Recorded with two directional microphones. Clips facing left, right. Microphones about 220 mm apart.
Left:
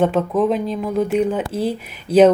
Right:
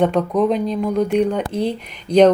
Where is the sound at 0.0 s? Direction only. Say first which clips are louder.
Even; 5° left (ahead or behind).